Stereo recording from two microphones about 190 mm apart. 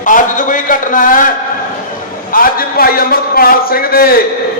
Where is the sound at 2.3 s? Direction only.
50° left (ahead or behind).